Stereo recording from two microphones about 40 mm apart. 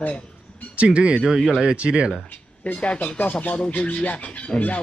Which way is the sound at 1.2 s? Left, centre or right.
Centre.